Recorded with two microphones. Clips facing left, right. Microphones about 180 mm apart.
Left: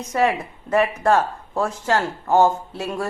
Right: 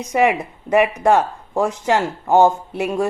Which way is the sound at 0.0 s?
15° right (ahead or behind).